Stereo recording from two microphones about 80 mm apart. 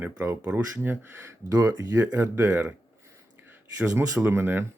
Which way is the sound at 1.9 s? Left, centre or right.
Right.